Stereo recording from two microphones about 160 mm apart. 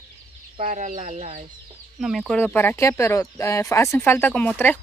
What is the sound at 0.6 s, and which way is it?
Speech, 50° right (ahead or behind).